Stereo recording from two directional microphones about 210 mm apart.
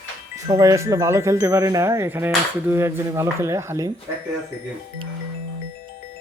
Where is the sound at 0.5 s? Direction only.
15° right (ahead or behind).